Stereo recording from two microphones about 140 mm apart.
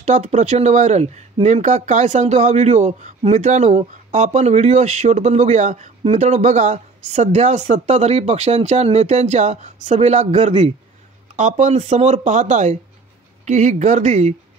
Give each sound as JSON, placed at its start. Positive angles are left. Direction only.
{"t": 0.0, "sound": "speech", "side_deg": -55}